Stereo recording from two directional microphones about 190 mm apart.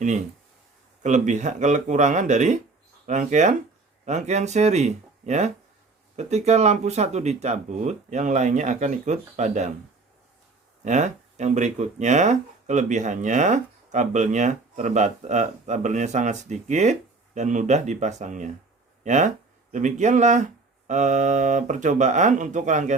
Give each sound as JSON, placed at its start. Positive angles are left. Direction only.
{"t": 1.0, "sound": "speech", "side_deg": -40}
{"t": 10.8, "sound": "speech", "side_deg": -40}